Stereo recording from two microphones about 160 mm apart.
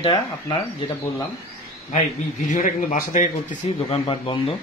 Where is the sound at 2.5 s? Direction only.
50° left (ahead or behind).